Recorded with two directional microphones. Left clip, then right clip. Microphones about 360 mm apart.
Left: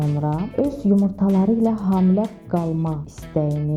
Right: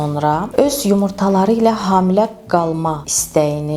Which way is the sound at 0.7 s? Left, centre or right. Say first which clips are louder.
Right 6 dB; centre.